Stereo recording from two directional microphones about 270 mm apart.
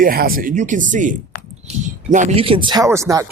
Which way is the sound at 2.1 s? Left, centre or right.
Right.